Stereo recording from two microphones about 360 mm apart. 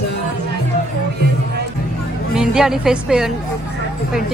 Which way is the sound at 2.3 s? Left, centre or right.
Centre.